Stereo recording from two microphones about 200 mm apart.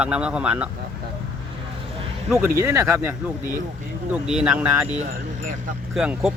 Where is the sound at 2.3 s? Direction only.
10° right (ahead or behind).